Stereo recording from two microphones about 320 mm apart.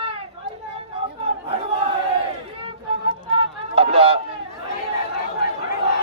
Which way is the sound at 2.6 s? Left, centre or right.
Centre.